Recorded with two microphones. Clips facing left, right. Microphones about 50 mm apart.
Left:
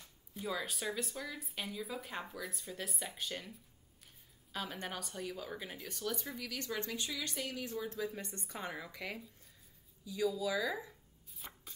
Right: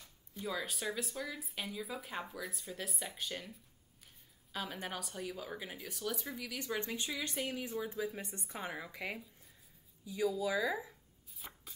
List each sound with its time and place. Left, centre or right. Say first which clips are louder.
0.3 s speech: even; centre
10.0 s speech: right 1 dB; right
10.9 s chopping: left 1 dB; centre